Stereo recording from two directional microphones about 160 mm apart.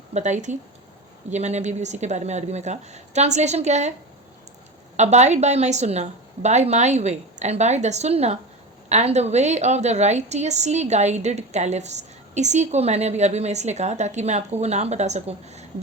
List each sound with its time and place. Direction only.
0.1 s a woman's voice: 50° right (ahead or behind)
4.9 s a woman's voice: 45° right (ahead or behind)